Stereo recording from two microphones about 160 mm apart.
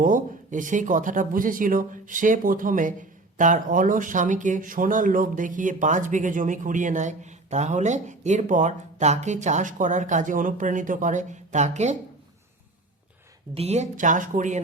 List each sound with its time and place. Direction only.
0.0 s speech: 55° right (ahead or behind)
13.5 s speech: 40° right (ahead or behind)